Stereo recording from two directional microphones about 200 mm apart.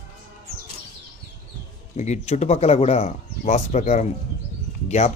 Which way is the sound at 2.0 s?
35° left (ahead or behind).